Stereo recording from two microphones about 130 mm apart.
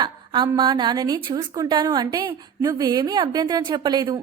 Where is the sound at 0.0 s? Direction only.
40° right (ahead or behind).